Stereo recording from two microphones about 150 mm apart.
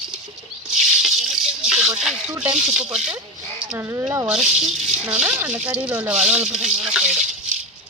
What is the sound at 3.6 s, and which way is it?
Speech, 15° right (ahead or behind).